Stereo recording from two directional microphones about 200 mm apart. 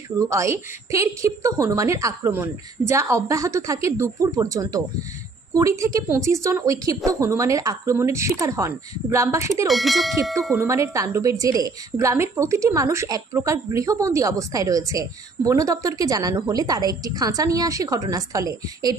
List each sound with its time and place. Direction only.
0.2 s a woman's voice: 15° right (ahead or behind)
9.7 s speech: centre (ahead or behind)
10.6 s a woman's voice: 15° right (ahead or behind)